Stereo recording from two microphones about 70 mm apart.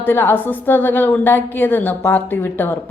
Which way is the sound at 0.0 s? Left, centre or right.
Left.